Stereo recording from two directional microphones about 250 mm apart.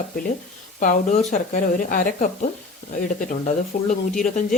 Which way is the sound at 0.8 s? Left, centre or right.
Left.